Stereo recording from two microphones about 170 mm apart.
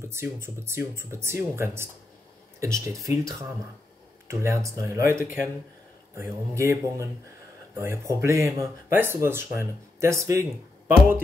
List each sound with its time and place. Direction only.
0.0 s speech: 15° right (ahead or behind)